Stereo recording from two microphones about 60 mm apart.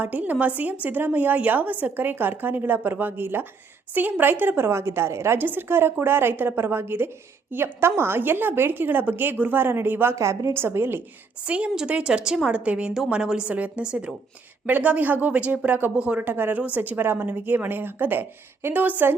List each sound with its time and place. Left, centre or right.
0.0 s a woman's voice: right
4.7 s a woman's voice: right
5.4 s a woman's voice: right
10.2 s a woman's voice: right
11.4 s a woman's voice: centre
16.2 s a woman's voice: right